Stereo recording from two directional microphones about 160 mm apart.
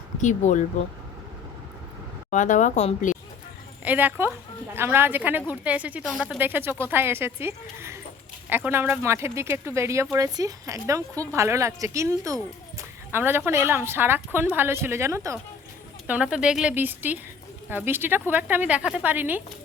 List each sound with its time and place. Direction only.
0.2 s speech: 50° left (ahead or behind)
2.3 s speech: 50° left (ahead or behind)
3.8 s speech: 10° right (ahead or behind)
16.0 s speech: 5° right (ahead or behind)